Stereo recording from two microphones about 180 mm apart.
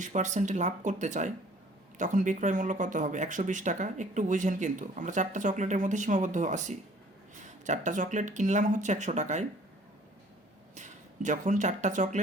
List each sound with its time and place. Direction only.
0.0 s speech: 45° right (ahead or behind)
10.8 s speech: 45° right (ahead or behind)